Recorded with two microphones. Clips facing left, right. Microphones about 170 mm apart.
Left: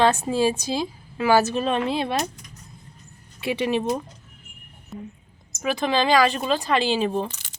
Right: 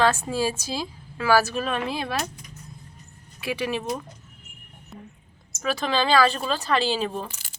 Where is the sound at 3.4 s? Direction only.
25° left (ahead or behind).